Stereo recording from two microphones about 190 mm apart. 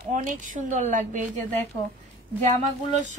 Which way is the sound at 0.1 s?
40° right (ahead or behind).